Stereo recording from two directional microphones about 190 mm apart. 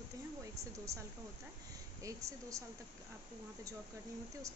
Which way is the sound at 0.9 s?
15° right (ahead or behind).